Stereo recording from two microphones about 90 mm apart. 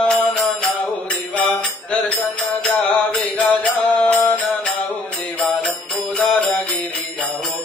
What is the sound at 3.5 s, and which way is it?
Mantra, 15° left (ahead or behind).